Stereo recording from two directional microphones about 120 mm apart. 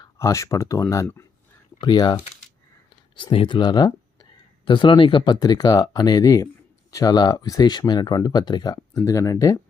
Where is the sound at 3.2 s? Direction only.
45° left (ahead or behind); by 4.3 s 30° left (ahead or behind).